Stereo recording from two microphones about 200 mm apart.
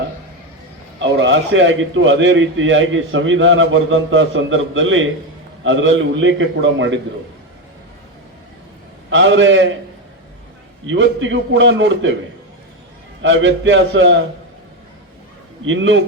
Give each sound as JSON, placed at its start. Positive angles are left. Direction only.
{"t": 1.1, "sound": "a man's voice", "side_deg": -70}
{"t": 9.0, "sound": "a man's voice", "side_deg": -65}
{"t": 10.8, "sound": "a man's voice", "side_deg": -65}
{"t": 13.2, "sound": "a man's voice", "side_deg": -65}
{"t": 15.6, "sound": "a man's voice", "side_deg": -70}